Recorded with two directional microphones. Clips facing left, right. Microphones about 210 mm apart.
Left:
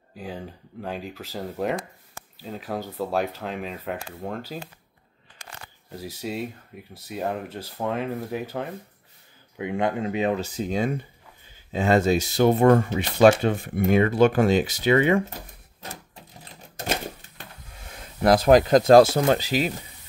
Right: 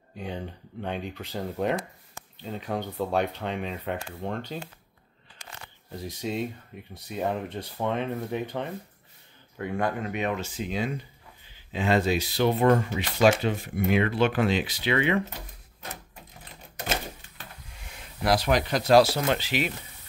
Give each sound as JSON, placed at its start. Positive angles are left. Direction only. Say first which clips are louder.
{"t": 0.1, "sound": "speech", "louder": "even", "side_deg": 0}
{"t": 9.6, "sound": "speech", "louder": "left 3 dB", "side_deg": 20}
{"t": 18.2, "sound": "speech", "louder": "left 8 dB", "side_deg": 50}